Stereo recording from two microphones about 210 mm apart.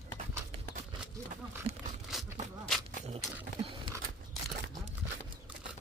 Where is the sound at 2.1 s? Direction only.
Centre (ahead or behind).